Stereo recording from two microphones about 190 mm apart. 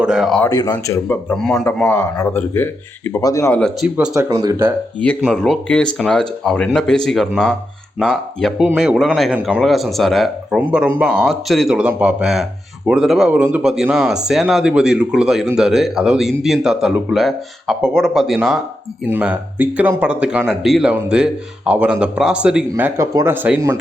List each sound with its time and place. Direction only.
0.0 s speech: 5° right (ahead or behind)
0.5 s speech: 20° left (ahead or behind); by 4.1 s 5° right (ahead or behind)
4.3 s speech: 15° right (ahead or behind)
5.2 s speech: centre (ahead or behind)
11.0 s speech: centre (ahead or behind)
22.7 s speech: 15° right (ahead or behind)